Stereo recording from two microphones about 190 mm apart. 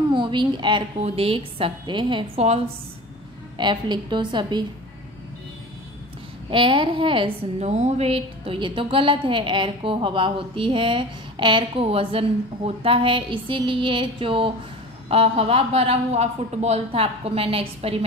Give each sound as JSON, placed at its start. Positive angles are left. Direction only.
{"t": 0.1, "sound": "a woman's voice", "side_deg": -25}
{"t": 6.5, "sound": "a woman's voice", "side_deg": -25}